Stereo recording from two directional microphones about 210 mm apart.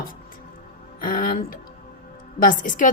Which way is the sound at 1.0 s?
45° left (ahead or behind).